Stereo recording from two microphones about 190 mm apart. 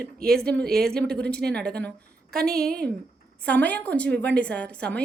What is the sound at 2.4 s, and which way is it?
Speech, 55° right (ahead or behind).